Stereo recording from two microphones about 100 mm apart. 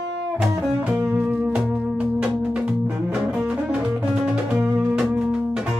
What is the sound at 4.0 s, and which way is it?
Music, 15° right (ahead or behind).